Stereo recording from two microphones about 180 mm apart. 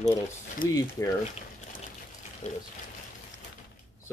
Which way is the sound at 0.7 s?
20° left (ahead or behind).